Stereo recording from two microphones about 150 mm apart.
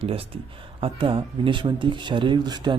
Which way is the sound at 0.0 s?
40° right (ahead or behind).